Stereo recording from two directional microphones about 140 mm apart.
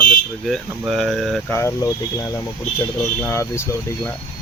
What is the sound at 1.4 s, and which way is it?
Speech, 15° left (ahead or behind).